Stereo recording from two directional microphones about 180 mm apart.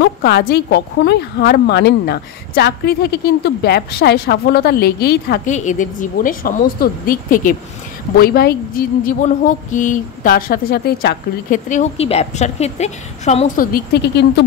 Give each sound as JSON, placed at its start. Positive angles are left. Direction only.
{"t": 0.0, "sound": "a woman's voice", "side_deg": 60}
{"t": 5.4, "sound": "a woman's voice", "side_deg": 45}
{"t": 9.0, "sound": "speech", "side_deg": 45}
{"t": 11.7, "sound": "a woman's voice", "side_deg": 35}
{"t": 13.7, "sound": "a woman's voice", "side_deg": 65}